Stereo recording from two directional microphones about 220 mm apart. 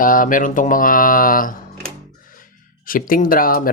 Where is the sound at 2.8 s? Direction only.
40° left (ahead or behind).